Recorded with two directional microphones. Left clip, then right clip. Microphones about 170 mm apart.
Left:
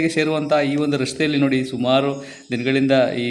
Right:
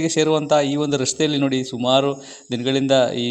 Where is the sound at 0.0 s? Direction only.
30° right (ahead or behind).